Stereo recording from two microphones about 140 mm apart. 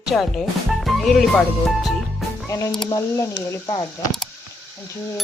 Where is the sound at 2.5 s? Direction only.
25° left (ahead or behind).